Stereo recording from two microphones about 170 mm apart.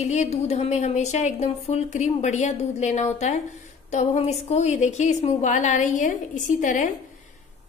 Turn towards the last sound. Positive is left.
turn(degrees=50)  # may be behind; listen again after turning